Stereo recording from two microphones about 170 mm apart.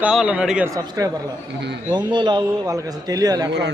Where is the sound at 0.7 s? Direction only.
20° right (ahead or behind).